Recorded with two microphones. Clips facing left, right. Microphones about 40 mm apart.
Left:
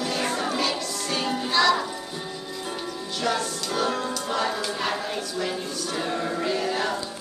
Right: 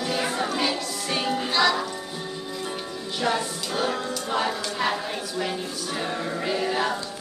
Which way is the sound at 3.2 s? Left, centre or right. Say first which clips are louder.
Right 1 dB; centre.